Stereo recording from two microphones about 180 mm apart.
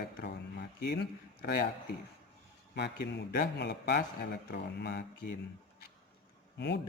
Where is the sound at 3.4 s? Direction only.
65° left (ahead or behind).